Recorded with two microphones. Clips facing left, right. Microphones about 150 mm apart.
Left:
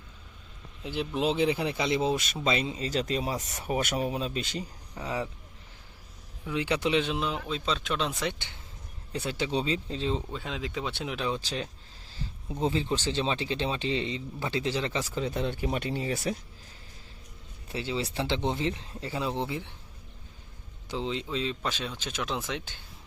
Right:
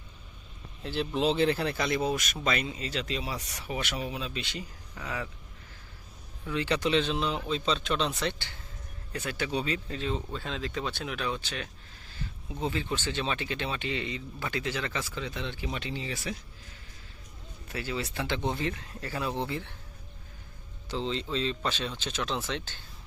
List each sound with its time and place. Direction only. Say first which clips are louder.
0.8 s speech: right 1 dB; 10° left (ahead or behind); by 4.6 s 40° left (ahead or behind)
4.9 s speech: left 4 dB; 30° left (ahead or behind)
6.4 s speech: even; 15° left (ahead or behind)
9.4 s speech: left 2 dB; 30° left (ahead or behind)
10.3 s speech: even; 15° left (ahead or behind); by 16.4 s 35° left (ahead or behind)
17.7 s speech: left 2 dB; 25° left (ahead or behind)
20.9 s speech: even; 10° left (ahead or behind)